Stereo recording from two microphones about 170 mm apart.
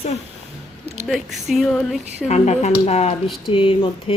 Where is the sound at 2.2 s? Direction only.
40° left (ahead or behind).